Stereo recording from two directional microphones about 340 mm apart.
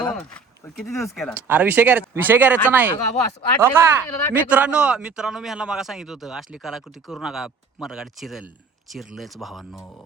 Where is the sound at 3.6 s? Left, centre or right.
Centre.